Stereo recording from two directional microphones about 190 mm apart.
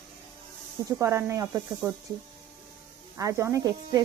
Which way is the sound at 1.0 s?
15° right (ahead or behind).